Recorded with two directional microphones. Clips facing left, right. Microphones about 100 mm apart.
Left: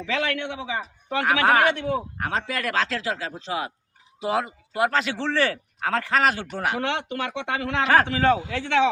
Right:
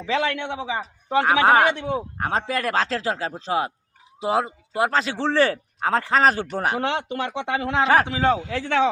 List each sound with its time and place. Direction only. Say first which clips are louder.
0.0 s a man's voice: right 3 dB; 30° right (ahead or behind)
8.4 s a man's voice: even; 40° right (ahead or behind)